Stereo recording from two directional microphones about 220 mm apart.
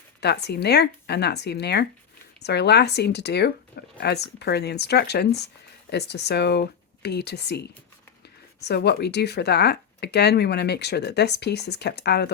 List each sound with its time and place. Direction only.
0.2 s speech: 50° left (ahead or behind)
8.6 s speech: 50° left (ahead or behind)